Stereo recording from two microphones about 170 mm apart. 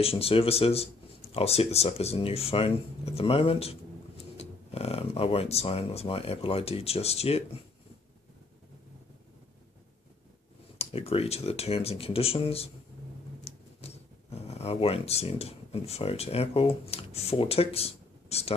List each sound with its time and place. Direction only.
0.0 s speech: 35° left (ahead or behind)
10.8 s speech: 35° left (ahead or behind)
13.4 s a sound: 35° left (ahead or behind)
14.4 s speech: 35° left (ahead or behind)